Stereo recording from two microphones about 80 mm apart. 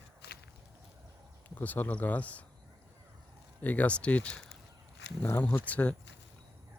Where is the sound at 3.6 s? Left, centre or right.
Left.